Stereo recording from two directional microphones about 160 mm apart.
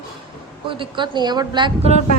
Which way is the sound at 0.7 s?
30° right (ahead or behind).